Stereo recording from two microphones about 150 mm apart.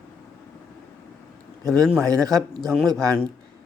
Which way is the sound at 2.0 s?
25° right (ahead or behind).